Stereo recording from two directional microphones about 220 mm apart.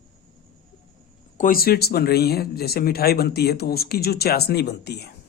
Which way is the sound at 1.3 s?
40° left (ahead or behind).